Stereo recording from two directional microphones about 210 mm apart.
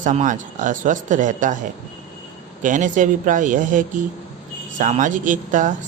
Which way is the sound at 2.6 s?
40° right (ahead or behind).